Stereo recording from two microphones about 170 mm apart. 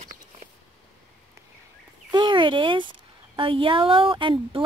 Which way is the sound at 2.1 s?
25° right (ahead or behind).